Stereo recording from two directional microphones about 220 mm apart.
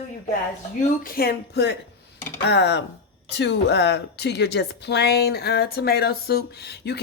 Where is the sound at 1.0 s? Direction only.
45° left (ahead or behind).